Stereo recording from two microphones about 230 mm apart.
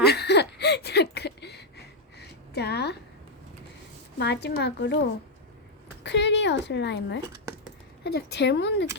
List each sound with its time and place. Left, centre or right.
0.1 s a sound: left
4.2 s speech: left
6.0 s a woman's voice: left